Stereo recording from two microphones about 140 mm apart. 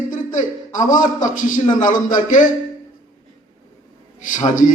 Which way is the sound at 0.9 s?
65° left (ahead or behind).